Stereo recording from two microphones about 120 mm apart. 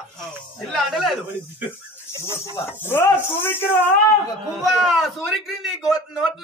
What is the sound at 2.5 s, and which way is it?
Speech, 20° left (ahead or behind).